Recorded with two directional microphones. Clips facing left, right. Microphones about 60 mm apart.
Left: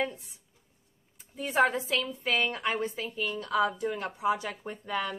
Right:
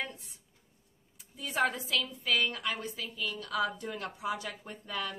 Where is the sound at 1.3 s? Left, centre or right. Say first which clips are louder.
Left 6 dB; left.